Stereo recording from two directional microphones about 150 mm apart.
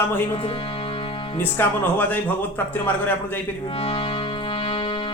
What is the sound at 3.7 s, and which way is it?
Music, 40° left (ahead or behind).